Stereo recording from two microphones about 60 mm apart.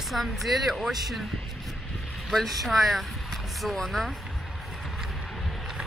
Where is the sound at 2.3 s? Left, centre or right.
Centre.